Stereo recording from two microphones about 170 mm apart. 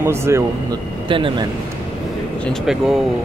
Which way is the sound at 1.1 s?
30° right (ahead or behind).